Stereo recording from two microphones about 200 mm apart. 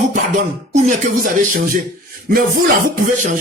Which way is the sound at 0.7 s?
35° right (ahead or behind).